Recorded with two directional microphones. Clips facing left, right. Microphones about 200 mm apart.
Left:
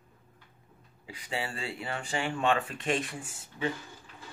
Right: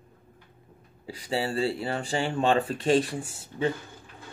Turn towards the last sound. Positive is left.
turn(degrees=-35)  # may be behind; listen again after turning